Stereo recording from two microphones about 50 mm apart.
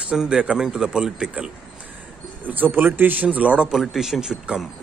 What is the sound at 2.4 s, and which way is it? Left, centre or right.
Speech, right.